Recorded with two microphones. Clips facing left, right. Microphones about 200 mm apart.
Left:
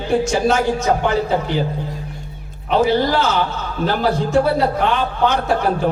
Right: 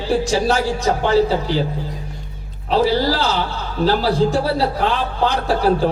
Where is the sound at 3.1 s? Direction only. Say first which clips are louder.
Left 2 dB; 35° right (ahead or behind).